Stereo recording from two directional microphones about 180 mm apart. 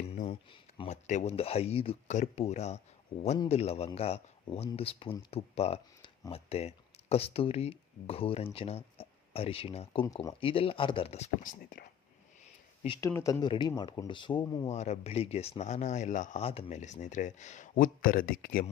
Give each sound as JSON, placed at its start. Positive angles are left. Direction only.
{"t": 0.1, "sound": "a sound", "side_deg": 35}
{"t": 0.8, "sound": "speech", "side_deg": 40}
{"t": 13.0, "sound": "speech", "side_deg": 15}
{"t": 14.7, "sound": "speech", "side_deg": 40}